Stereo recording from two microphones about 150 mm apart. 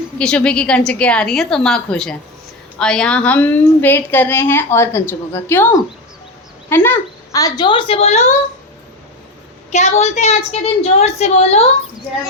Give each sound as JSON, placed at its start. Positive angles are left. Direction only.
{"t": 0.2, "sound": "a woman's voice", "side_deg": 5}
{"t": 7.4, "sound": "a woman's voice", "side_deg": 30}
{"t": 9.7, "sound": "a woman's voice", "side_deg": 50}